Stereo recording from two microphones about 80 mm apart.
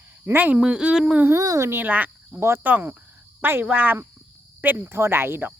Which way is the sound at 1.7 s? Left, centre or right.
Right.